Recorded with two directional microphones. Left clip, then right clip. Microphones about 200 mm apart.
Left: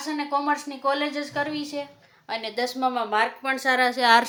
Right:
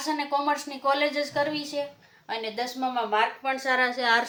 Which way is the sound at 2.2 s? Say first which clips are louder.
Left 3 dB; 40° left (ahead or behind).